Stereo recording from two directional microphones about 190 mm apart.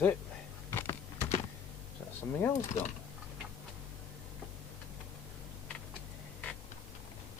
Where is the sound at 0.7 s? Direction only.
15° left (ahead or behind).